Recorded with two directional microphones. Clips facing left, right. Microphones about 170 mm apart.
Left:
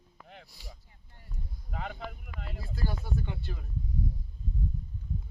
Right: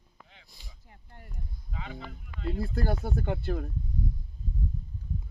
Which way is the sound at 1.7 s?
55° left (ahead or behind).